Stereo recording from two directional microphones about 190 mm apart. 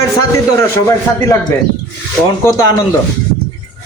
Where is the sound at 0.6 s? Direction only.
15° left (ahead or behind).